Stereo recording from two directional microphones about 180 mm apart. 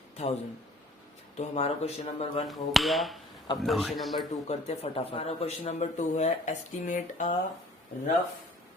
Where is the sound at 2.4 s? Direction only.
Centre (ahead or behind).